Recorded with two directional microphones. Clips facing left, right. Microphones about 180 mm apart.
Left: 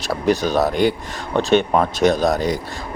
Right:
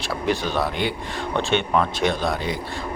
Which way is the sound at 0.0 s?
40° left (ahead or behind).